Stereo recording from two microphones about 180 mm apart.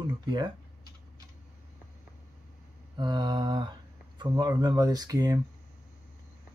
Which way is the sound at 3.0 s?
25° right (ahead or behind).